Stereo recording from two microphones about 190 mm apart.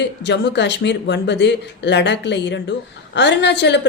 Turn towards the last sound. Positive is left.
turn(degrees=65)  # may be behind; listen again after turning